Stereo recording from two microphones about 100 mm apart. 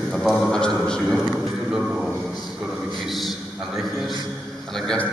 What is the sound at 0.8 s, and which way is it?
Speech, 5° left (ahead or behind).